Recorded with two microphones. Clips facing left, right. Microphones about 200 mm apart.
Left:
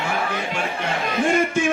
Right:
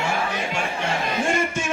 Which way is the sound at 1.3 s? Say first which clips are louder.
Left 5 dB; 55° left (ahead or behind).